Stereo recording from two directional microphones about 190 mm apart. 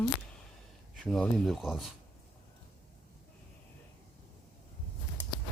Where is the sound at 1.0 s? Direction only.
Centre (ahead or behind).